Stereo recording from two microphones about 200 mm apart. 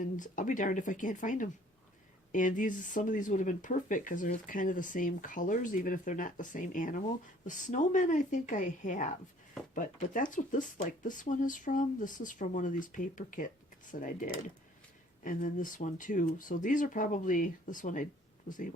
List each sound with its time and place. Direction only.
0.2 s speech: 40° left (ahead or behind)